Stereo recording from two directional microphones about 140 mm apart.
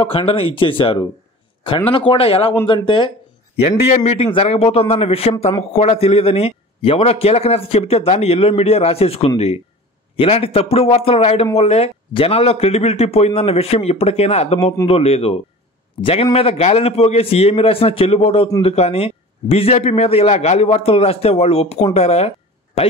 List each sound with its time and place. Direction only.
0.0 s speech: 40° left (ahead or behind)
3.9 s a man's voice: 50° left (ahead or behind)